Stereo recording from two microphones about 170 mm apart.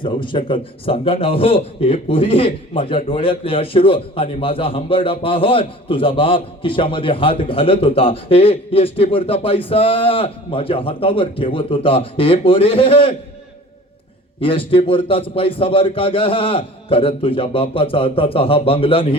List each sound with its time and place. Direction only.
0.0 s a man's voice: 30° left (ahead or behind)
14.4 s a man's voice: 30° left (ahead or behind)